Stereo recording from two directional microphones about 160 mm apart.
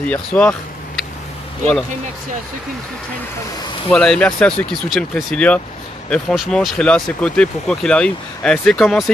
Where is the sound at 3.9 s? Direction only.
5° left (ahead or behind).